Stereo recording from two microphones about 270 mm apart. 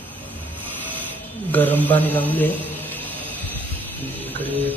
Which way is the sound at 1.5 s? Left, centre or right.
Centre.